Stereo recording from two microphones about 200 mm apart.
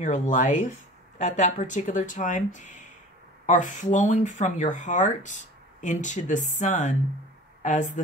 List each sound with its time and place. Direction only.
0.0 s speech: 40° left (ahead or behind)